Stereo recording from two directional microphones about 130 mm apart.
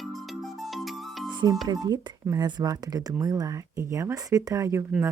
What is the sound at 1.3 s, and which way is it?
Speech, 35° right (ahead or behind).